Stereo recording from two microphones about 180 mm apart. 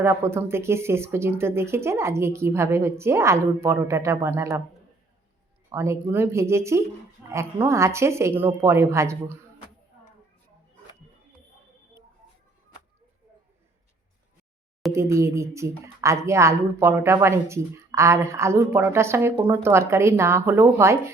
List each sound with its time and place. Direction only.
0.0 s speech: 15° right (ahead or behind)
5.7 s speech: 15° right (ahead or behind)
14.9 s speech: 15° right (ahead or behind)